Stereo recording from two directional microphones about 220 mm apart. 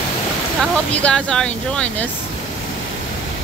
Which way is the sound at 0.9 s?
5° left (ahead or behind).